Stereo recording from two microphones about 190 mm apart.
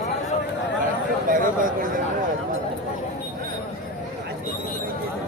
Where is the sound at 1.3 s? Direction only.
45° right (ahead or behind).